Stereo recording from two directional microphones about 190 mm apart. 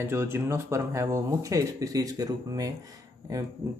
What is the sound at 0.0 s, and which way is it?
Speech, 15° right (ahead or behind).